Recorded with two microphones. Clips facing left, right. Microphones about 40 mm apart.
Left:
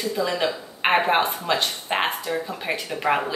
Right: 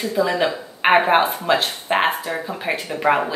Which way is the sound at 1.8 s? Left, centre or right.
Centre.